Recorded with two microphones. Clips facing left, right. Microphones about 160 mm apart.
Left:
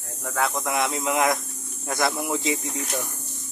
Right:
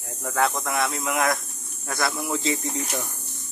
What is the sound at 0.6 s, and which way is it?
Speech, 20° left (ahead or behind).